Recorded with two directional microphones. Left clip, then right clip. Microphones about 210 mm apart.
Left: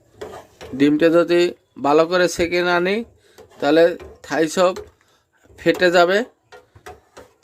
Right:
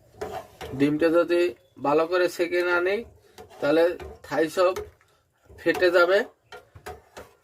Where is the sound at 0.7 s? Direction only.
45° left (ahead or behind).